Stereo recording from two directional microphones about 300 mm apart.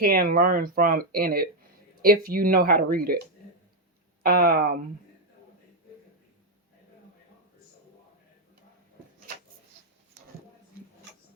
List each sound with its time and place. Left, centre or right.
0.0 s speech: right
4.2 s speech: right